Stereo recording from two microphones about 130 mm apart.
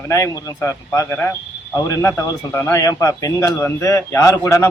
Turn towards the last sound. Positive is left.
turn(degrees=20)  # may be behind; listen again after turning